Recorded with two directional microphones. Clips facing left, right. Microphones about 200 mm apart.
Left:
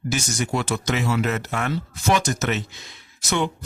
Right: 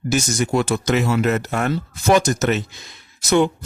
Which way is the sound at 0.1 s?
45° right (ahead or behind).